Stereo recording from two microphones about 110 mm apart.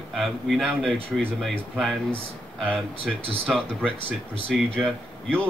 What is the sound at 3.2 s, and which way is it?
Speech, 60° right (ahead or behind).